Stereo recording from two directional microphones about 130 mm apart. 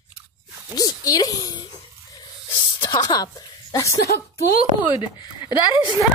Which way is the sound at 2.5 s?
35° left (ahead or behind).